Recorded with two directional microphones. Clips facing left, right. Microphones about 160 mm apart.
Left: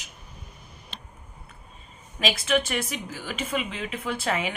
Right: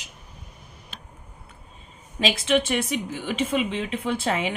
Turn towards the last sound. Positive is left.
turn(degrees=-30)  # may be behind; listen again after turning